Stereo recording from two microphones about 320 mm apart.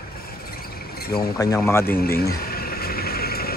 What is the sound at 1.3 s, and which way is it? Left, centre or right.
Speech, centre.